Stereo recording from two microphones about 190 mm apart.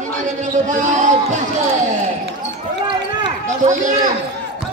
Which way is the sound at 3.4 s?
40° right (ahead or behind).